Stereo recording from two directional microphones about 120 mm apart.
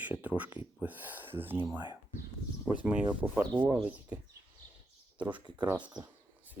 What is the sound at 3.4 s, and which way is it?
Speech, 35° right (ahead or behind).